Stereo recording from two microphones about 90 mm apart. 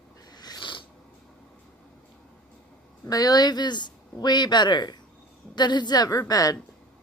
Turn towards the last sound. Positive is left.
turn(degrees=45)  # may be behind; listen again after turning